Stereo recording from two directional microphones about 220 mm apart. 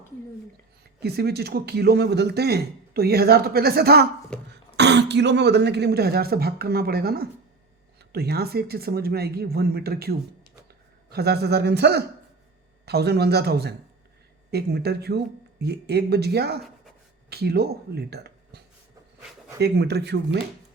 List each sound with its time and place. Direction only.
1.0 s speech: 45° right (ahead or behind)
4.3 s cough: 5° left (ahead or behind)
4.8 s speech: 50° right (ahead or behind)